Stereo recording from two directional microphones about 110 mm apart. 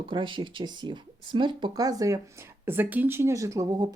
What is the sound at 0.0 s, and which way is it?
Speech, 45° right (ahead or behind).